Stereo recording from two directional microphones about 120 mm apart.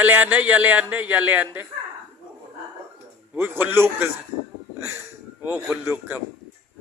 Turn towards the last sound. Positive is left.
turn(degrees=-25)  # may be behind; listen again after turning